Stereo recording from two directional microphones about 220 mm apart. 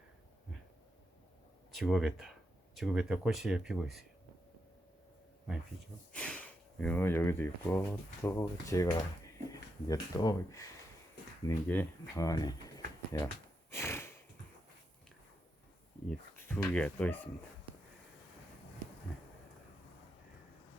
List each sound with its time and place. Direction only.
1.7 s speech: centre (ahead or behind)
6.1 s speech: 5° left (ahead or behind)
13.7 s snort: 10° left (ahead or behind)
16.0 s speech: 5° left (ahead or behind)